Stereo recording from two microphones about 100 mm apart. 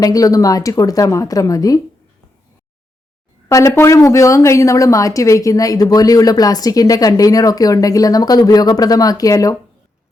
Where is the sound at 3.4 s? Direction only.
35° left (ahead or behind).